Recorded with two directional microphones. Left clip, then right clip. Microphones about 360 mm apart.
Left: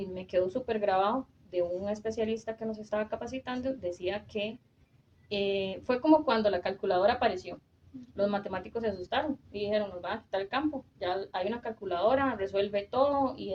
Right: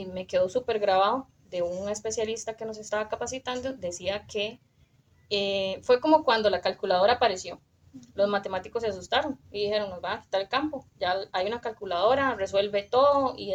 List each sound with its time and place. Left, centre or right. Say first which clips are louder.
0.1 s speech: right 5 dB; right